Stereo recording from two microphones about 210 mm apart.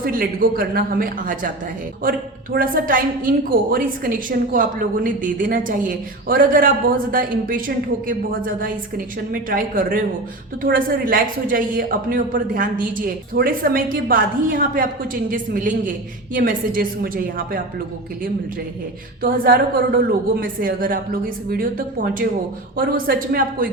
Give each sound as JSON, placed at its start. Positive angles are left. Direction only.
{"t": 0.0, "sound": "a man's voice", "side_deg": -45}
{"t": 19.2, "sound": "a man's voice", "side_deg": -45}